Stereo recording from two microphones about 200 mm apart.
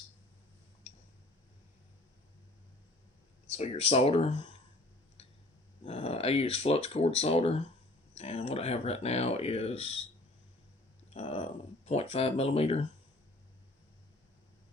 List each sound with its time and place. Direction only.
3.6 s speech: 30° left (ahead or behind)
5.8 s speech: 30° left (ahead or behind)
11.1 s speech: 30° left (ahead or behind)